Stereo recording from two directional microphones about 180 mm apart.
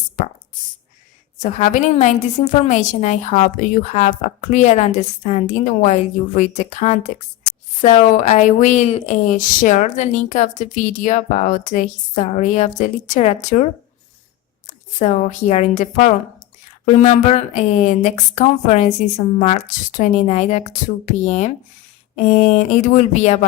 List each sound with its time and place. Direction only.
0.2 s speech: 45° left (ahead or behind)
1.4 s a woman's voice: 40° left (ahead or behind)
8.1 s a woman's voice: 40° left (ahead or behind)
14.9 s a woman's voice: 45° left (ahead or behind)